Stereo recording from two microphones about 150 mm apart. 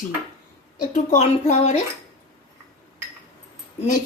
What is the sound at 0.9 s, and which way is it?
Speech, 50° left (ahead or behind).